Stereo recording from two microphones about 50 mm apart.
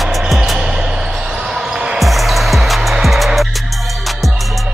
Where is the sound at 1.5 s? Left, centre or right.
Centre.